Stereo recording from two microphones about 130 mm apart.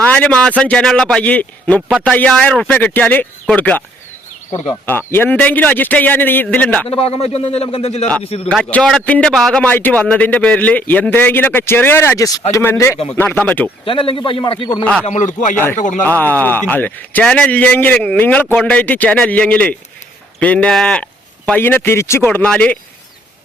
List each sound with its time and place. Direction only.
0.0 s a man's voice: 10° left (ahead or behind)
4.9 s a man's voice: 15° left (ahead or behind)
6.8 s speech: 50° left (ahead or behind)
8.4 s a man's voice: 5° left (ahead or behind)
13.8 s a man's voice: 45° left (ahead or behind)
15.0 s speech: 70° left (ahead or behind)
16.0 s a man's voice: 15° left (ahead or behind)